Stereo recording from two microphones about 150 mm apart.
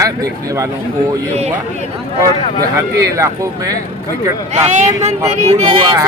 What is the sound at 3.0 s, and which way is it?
Speech, 20° right (ahead or behind).